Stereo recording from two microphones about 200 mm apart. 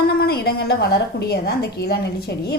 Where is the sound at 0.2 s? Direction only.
50° left (ahead or behind).